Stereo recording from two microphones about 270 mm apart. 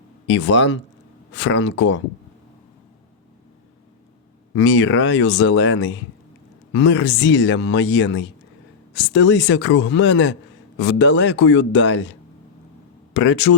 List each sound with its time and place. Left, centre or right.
0.3 s speech: left
4.5 s speech: left
13.1 s speech: left